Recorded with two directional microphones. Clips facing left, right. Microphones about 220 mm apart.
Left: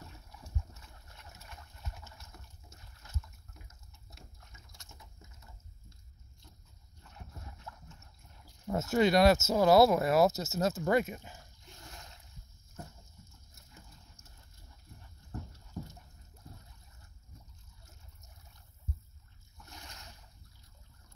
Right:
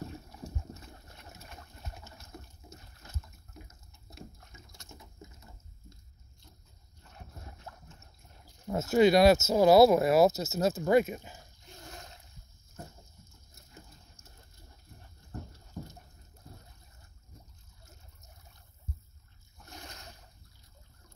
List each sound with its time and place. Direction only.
0.3 s boat: 40° right (ahead or behind)
8.8 s speech: 5° right (ahead or behind)
19.7 s splash: 50° right (ahead or behind)